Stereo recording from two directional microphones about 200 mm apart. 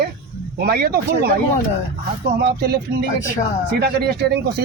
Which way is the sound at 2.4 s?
55° right (ahead or behind).